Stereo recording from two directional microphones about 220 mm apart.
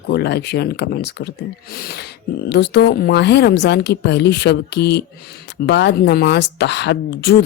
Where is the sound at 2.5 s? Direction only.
50° left (ahead or behind).